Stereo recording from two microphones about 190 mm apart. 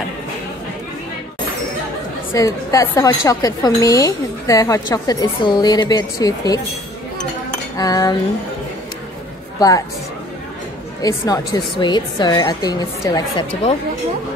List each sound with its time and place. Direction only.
2.3 s a woman's voice: 15° left (ahead or behind)
7.7 s a woman's voice: 20° left (ahead or behind)
9.6 s a woman's voice: 20° left (ahead or behind)
11.0 s a woman's voice: 20° left (ahead or behind)